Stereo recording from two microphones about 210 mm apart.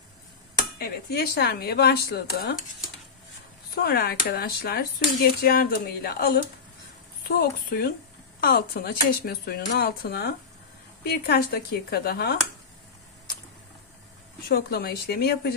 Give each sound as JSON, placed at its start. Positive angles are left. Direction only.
{"t": 0.7, "sound": "speech", "side_deg": 50}
{"t": 3.7, "sound": "speech", "side_deg": 50}
{"t": 14.5, "sound": "speech", "side_deg": 45}